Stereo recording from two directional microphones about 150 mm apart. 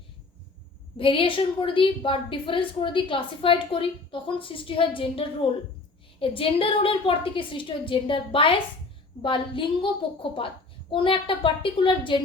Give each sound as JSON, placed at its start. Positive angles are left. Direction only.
{"t": 0.9, "sound": "a woman's voice", "side_deg": 35}